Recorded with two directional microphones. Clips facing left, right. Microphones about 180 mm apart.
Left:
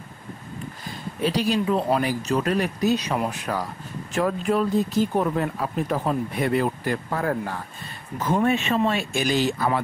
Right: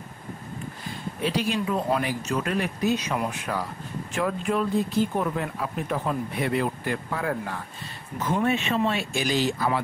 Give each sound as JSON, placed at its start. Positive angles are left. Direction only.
{"t": 1.2, "sound": "speech", "side_deg": 35}